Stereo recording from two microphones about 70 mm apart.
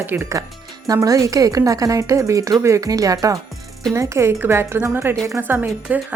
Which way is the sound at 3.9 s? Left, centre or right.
Right.